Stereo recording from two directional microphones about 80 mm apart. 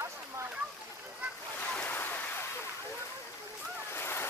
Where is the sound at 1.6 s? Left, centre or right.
Centre.